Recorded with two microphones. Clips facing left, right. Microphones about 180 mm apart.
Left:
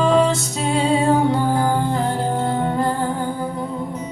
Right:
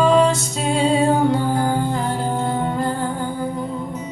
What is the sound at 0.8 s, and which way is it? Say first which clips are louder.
Music: right 1 dB; 55° left (ahead or behind).